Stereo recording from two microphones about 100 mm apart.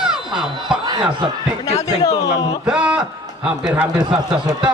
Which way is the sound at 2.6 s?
10° right (ahead or behind).